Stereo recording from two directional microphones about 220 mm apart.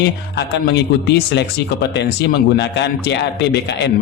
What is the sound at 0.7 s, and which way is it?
Speech, 50° left (ahead or behind).